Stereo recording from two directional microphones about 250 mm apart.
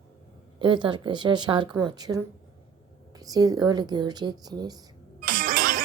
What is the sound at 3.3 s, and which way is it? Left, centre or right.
Speech, centre.